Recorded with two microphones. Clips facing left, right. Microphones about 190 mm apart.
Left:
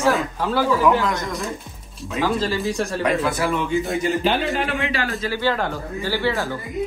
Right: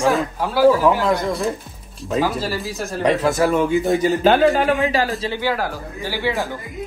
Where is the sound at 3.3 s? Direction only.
45° right (ahead or behind).